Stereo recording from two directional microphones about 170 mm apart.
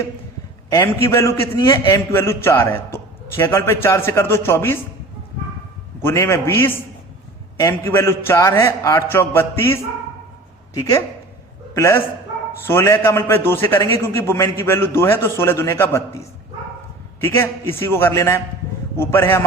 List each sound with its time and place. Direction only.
0.7 s a man's voice: 15° left (ahead or behind)
6.0 s a man's voice: 15° left (ahead or behind)
11.7 s a man's voice: 15° left (ahead or behind)
17.2 s a man's voice: 15° left (ahead or behind)